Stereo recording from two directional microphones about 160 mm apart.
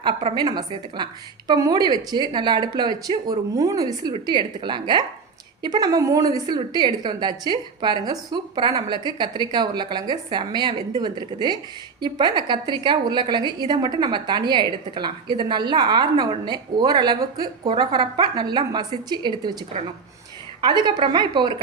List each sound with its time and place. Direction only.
0.0 s a woman's voice: 40° right (ahead or behind)
0.3 s a woman's voice: 25° right (ahead or behind)
20.6 s a woman's voice: 30° right (ahead or behind)